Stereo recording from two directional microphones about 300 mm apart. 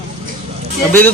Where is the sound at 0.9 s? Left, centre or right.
Centre.